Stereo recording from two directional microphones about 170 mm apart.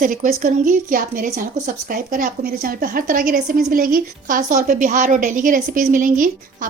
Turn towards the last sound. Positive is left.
turn(degrees=-50)  # may be behind; listen again after turning